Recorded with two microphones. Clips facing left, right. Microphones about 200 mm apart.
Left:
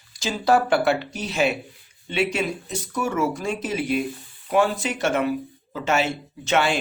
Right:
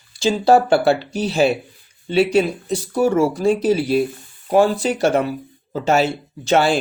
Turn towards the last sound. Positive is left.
turn(degrees=-35)  # may be behind; listen again after turning